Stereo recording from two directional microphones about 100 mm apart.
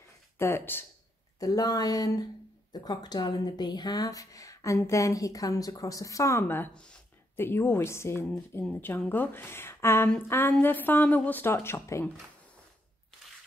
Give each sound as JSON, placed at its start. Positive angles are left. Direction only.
{"t": 0.4, "sound": "a woman's voice", "side_deg": 25}
{"t": 1.4, "sound": "speech", "side_deg": 40}
{"t": 6.4, "sound": "a woman's voice", "side_deg": 20}